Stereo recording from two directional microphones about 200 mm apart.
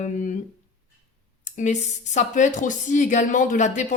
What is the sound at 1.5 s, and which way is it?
Speech, 35° left (ahead or behind).